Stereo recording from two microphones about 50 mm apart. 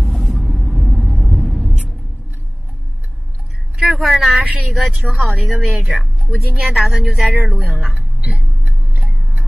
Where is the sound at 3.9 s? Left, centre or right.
Centre.